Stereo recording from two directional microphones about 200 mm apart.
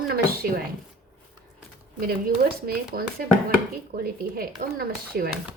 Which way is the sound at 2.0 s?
50° right (ahead or behind).